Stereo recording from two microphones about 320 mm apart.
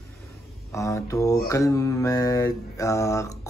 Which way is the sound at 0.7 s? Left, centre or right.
Centre.